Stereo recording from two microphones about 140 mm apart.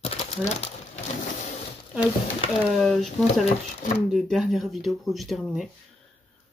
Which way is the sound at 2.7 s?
5° left (ahead or behind).